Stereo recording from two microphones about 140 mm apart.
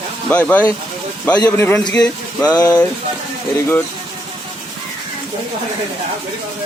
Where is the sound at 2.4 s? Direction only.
25° left (ahead or behind).